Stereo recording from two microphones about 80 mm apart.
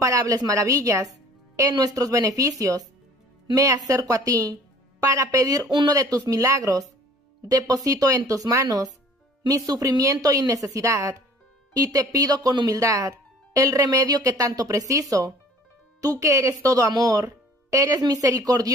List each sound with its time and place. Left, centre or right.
0.0 s speech: right
3.5 s speech: right
5.7 s speech: right
5.9 s speech: right